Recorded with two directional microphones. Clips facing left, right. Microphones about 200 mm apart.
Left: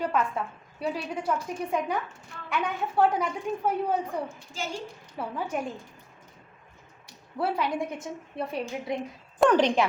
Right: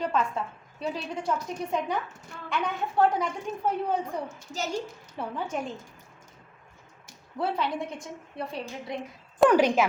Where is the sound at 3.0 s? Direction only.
10° left (ahead or behind).